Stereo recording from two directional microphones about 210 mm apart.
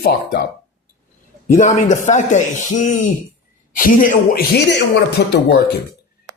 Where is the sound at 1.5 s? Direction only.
35° left (ahead or behind).